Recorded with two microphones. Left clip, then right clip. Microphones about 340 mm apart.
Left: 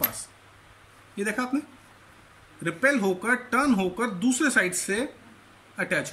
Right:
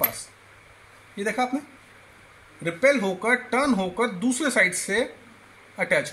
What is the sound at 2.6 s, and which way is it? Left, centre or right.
Speech, centre.